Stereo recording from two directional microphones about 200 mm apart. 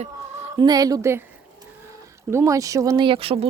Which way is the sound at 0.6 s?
20° right (ahead or behind).